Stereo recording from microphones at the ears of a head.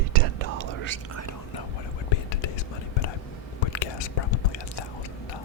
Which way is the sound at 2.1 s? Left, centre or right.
Left.